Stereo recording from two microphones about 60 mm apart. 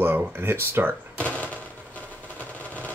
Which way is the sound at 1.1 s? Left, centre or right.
Left.